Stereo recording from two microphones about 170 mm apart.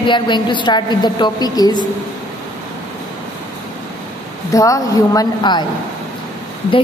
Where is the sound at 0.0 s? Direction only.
30° left (ahead or behind).